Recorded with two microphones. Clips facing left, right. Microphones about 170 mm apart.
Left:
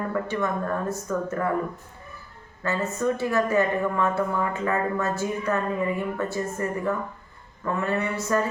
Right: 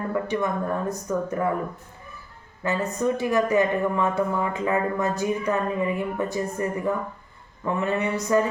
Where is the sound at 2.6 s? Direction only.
15° right (ahead or behind).